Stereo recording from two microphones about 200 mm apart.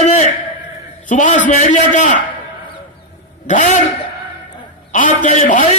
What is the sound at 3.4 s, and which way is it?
Speech, 40° left (ahead or behind).